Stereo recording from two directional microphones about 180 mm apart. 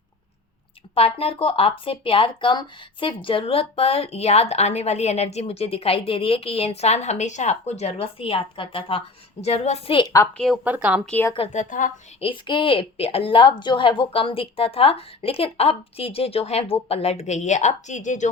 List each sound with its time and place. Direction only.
0.9 s speech: 30° left (ahead or behind)
10.3 s speech: centre (ahead or behind)
11.1 s a woman's voice: 10° left (ahead or behind)
11.3 s a woman's voice: 45° left (ahead or behind)
12.2 s speech: 30° left (ahead or behind)